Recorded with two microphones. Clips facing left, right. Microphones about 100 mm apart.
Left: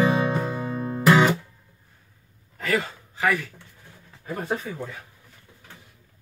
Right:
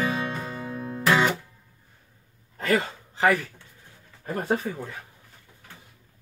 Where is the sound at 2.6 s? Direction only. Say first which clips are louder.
Right 1 dB; 35° right (ahead or behind).